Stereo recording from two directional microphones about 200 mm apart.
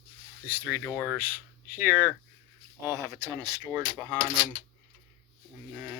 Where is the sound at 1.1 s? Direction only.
10° right (ahead or behind).